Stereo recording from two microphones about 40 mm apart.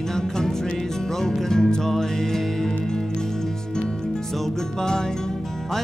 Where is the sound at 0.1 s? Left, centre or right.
Centre.